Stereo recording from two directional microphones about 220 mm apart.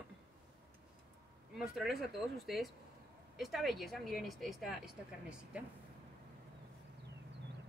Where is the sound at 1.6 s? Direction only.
Centre (ahead or behind).